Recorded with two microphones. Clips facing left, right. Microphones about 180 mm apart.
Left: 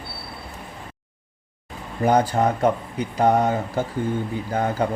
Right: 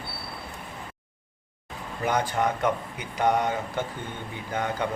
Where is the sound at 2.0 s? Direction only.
35° left (ahead or behind).